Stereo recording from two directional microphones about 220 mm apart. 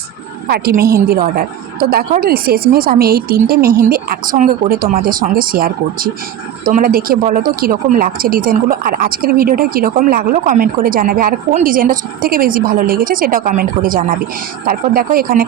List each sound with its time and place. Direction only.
0.4 s a woman's voice: 45° right (ahead or behind)